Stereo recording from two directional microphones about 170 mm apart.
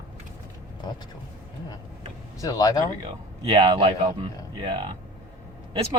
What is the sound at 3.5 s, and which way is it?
Speech, 30° right (ahead or behind).